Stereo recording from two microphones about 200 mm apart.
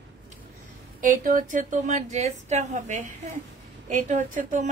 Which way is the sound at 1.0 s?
40° right (ahead or behind).